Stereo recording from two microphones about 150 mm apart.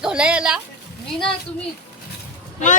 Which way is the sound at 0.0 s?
5° right (ahead or behind).